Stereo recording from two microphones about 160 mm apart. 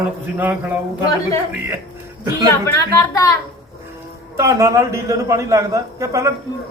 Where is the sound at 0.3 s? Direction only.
10° right (ahead or behind).